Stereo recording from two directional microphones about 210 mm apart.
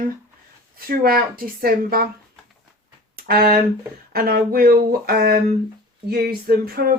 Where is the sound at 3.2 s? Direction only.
45° right (ahead or behind).